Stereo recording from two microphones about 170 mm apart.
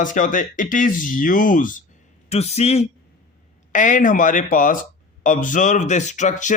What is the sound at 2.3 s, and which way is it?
A man's voice, 40° left (ahead or behind).